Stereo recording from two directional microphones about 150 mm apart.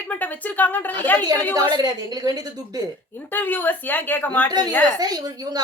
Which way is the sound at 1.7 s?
25° right (ahead or behind).